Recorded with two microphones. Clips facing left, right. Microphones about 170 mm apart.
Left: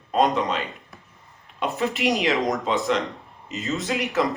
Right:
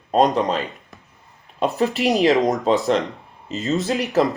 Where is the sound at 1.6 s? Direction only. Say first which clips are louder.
Right 4 dB; 35° right (ahead or behind).